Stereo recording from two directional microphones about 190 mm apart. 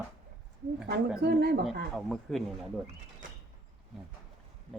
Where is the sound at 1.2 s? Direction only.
60° right (ahead or behind).